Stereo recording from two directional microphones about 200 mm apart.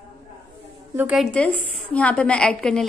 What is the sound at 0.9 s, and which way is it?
A woman's voice, 5° right (ahead or behind).